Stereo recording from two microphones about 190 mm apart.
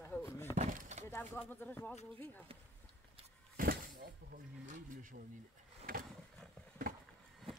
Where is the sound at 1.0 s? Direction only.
15° left (ahead or behind).